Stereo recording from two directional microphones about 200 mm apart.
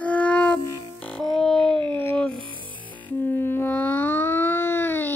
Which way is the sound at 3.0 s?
10° left (ahead or behind).